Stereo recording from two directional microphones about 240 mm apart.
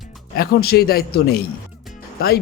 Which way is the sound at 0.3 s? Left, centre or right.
Left.